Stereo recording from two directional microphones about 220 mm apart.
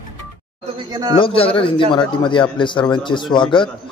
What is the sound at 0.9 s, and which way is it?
Speech, 15° right (ahead or behind).